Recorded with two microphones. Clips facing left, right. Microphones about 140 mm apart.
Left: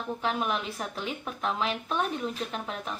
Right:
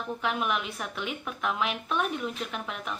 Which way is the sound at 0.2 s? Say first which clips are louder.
Even; 35° left (ahead or behind).